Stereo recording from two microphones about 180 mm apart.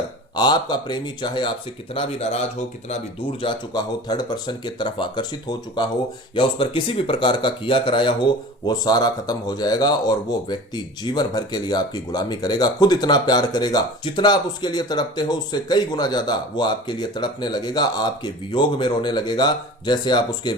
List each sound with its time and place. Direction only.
0.3 s speech: 25° left (ahead or behind)
3.4 s speech: 25° left (ahead or behind)